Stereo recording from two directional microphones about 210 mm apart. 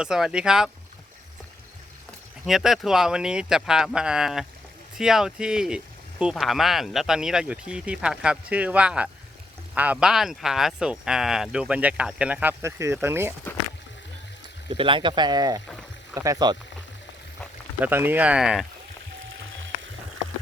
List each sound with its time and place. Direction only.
0.0 s speech: 5° right (ahead or behind)
2.5 s speech: centre (ahead or behind)
14.7 s speech: 25° right (ahead or behind)
17.7 s speech: 10° right (ahead or behind)
19.5 s a sound: 65° right (ahead or behind)